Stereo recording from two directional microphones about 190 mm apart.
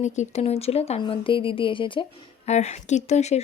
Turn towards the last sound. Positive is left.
turn(degrees=35)  # may be behind; listen again after turning